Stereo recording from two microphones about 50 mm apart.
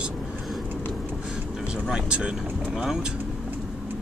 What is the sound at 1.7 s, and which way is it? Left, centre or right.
Speech, centre.